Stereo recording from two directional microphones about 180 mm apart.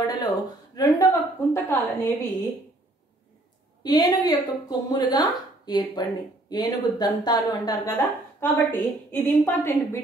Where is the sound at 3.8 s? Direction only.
20° left (ahead or behind).